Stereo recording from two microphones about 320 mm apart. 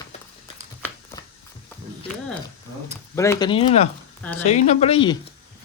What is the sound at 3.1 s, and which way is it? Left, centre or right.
Speech, centre.